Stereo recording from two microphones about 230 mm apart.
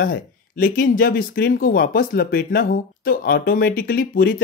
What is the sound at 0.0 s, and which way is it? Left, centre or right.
Speech, left.